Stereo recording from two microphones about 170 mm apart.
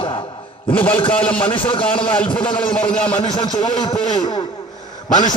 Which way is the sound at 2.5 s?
5° left (ahead or behind).